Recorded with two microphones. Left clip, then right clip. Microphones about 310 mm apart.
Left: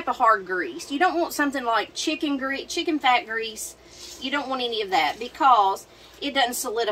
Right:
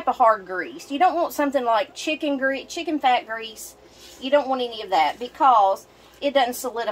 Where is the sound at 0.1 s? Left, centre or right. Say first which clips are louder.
Right 2 dB; centre.